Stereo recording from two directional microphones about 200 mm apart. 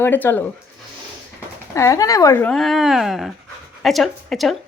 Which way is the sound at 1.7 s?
15° left (ahead or behind).